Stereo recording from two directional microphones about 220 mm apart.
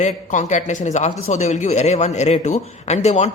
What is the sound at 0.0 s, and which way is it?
A man's voice, 35° left (ahead or behind).